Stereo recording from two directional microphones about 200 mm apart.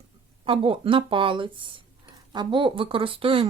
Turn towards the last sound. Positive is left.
turn(degrees=-25)  # may be behind; listen again after turning